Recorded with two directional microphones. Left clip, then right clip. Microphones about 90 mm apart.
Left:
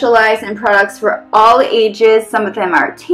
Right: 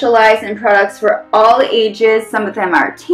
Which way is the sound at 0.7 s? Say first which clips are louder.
Right 1 dB; 40° left (ahead or behind).